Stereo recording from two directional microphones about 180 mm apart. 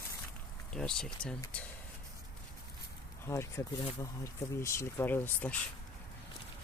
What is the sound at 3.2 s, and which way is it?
Speech, 15° left (ahead or behind).